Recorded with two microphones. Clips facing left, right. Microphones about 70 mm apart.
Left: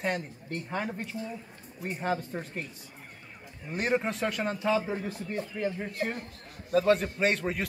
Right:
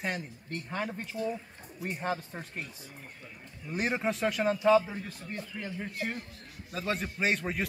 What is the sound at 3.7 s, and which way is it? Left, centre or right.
Speech, centre.